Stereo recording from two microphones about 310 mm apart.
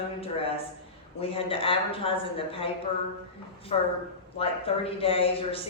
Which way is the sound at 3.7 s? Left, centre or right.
Centre.